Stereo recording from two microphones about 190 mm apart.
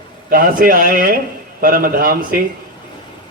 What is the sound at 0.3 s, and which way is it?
A man's voice, 50° right (ahead or behind).